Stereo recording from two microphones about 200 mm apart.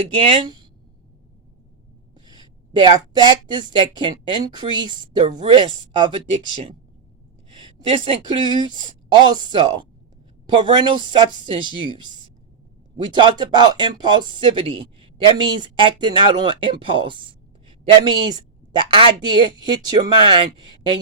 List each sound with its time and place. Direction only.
0.1 s a woman's voice: 25° right (ahead or behind)
2.1 s gasp: 20° right (ahead or behind)
2.7 s speech: 20° right (ahead or behind)
7.5 s a woman's voice: 25° right (ahead or behind)